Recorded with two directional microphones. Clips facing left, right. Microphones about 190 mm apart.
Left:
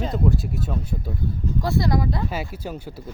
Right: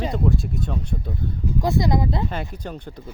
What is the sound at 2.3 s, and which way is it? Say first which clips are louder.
Speech: left 1 dB; 5° left (ahead or behind).